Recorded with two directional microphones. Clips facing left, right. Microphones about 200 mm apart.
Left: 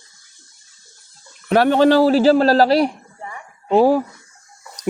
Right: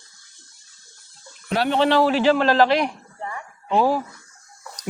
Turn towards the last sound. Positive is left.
turn(degrees=40)  # may be behind; listen again after turning